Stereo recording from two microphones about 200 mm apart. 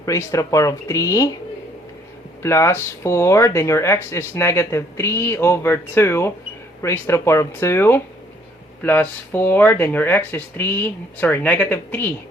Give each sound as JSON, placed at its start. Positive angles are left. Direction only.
{"t": 0.0, "sound": "speech", "side_deg": 15}
{"t": 2.4, "sound": "speech", "side_deg": 15}